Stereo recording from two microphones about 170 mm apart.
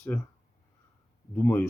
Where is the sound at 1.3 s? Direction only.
10° left (ahead or behind).